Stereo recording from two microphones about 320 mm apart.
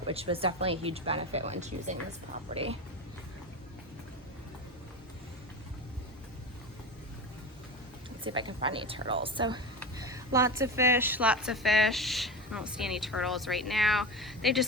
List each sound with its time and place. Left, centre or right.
0.1 s speech: centre
8.2 s a woman's voice: centre